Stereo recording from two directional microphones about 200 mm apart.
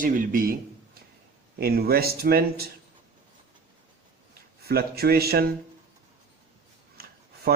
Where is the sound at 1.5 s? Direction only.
50° right (ahead or behind).